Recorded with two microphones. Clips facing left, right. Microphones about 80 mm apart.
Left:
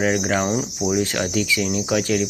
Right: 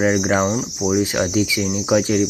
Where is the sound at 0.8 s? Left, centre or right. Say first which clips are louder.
Right 5 dB; centre.